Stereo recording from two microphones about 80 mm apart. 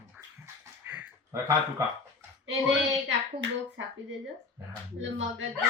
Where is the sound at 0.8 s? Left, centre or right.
Right.